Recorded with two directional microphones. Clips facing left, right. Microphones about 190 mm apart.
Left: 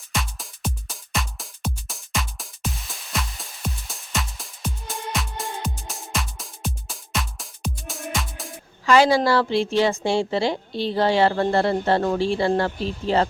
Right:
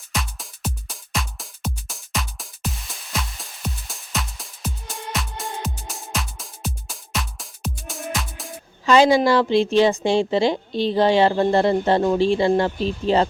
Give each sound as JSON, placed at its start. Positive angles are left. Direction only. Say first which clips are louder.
{"t": 0.1, "sound": "music", "louder": "even", "side_deg": 0}
{"t": 8.9, "sound": "a woman's voice", "louder": "right 2 dB", "side_deg": -20}